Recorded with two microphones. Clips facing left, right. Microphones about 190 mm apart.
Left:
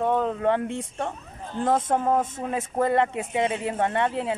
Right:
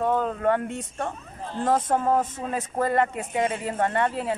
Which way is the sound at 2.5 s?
10° left (ahead or behind).